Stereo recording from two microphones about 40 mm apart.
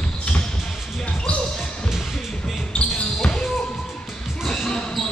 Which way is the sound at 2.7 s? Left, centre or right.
Left.